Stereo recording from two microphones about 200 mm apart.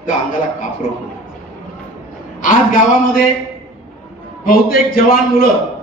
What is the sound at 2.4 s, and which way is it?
Speech, 40° left (ahead or behind).